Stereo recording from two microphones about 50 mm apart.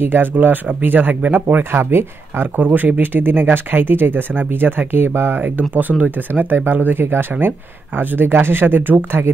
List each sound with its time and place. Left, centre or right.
0.0 s speech: right
1.6 s speech: right
2.5 s speech: right